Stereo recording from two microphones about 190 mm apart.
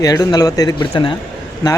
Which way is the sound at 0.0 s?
20° left (ahead or behind).